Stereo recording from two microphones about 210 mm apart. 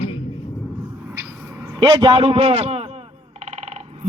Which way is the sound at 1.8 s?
25° right (ahead or behind).